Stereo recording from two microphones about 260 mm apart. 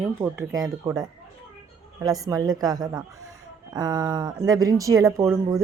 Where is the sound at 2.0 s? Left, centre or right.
Centre.